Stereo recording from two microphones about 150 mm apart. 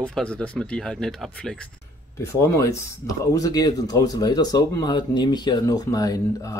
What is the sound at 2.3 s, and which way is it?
Speech, 20° left (ahead or behind).